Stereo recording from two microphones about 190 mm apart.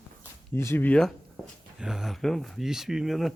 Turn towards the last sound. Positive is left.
turn(degrees=0)  # may be behind; listen again after turning